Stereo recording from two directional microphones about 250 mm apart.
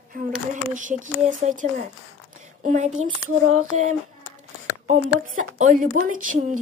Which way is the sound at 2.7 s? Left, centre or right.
Right.